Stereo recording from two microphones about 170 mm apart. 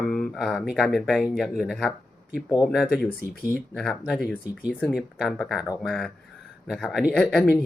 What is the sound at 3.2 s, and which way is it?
Speech, 65° left (ahead or behind).